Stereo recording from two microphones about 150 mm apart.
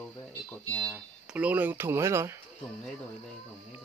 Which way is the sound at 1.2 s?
10° right (ahead or behind).